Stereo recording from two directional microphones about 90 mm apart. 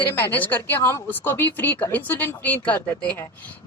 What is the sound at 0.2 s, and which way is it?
A woman's voice, 20° left (ahead or behind).